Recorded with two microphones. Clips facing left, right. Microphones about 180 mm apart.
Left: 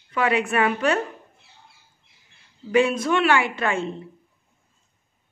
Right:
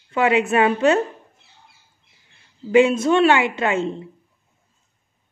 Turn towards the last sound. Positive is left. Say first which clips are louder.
# right 3 dB
turn(degrees=-20)  # may be behind; listen again after turning